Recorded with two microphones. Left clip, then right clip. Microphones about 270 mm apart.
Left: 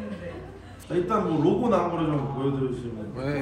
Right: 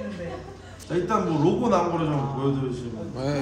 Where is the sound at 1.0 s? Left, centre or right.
Centre.